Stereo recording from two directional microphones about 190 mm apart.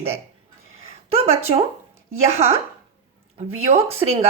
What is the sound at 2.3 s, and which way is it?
Speech, 35° right (ahead or behind).